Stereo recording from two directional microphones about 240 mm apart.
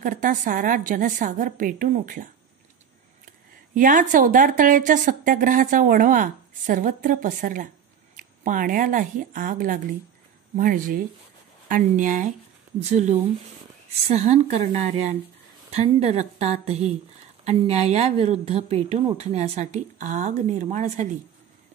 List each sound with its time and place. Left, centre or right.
0.0 s a woman's voice: right
3.7 s a woman's voice: right
13.8 s speech: right